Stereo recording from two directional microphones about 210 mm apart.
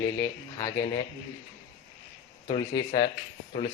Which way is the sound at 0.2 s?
15° left (ahead or behind).